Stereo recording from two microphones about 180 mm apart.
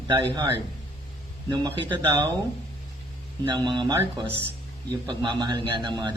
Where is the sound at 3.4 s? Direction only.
25° right (ahead or behind).